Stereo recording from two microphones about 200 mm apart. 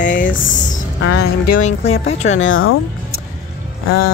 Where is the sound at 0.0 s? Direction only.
40° left (ahead or behind).